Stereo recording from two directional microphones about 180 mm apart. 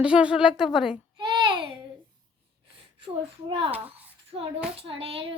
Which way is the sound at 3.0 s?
30° right (ahead or behind).